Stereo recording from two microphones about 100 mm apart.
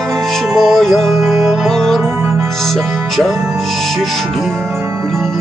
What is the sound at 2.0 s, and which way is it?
Music, 25° right (ahead or behind).